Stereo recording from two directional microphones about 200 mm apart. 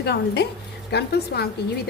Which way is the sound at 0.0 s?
55° left (ahead or behind).